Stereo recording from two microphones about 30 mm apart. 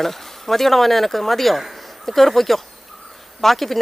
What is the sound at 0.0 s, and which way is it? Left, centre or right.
Speech, centre.